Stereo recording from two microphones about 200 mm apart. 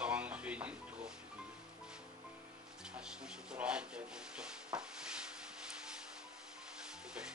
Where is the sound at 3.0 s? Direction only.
5° right (ahead or behind).